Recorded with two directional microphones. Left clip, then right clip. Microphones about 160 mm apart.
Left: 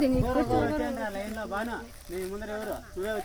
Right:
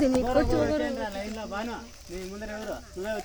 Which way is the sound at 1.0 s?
40° right (ahead or behind).